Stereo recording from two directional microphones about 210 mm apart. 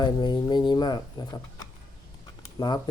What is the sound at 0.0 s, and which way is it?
Speech, 20° left (ahead or behind).